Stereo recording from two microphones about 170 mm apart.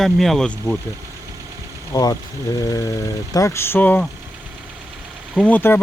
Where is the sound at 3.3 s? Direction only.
20° left (ahead or behind).